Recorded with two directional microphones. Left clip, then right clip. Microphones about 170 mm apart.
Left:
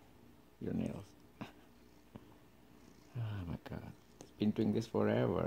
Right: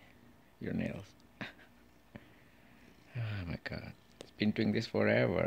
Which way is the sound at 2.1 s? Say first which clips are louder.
Right 3 dB; 25° right (ahead or behind).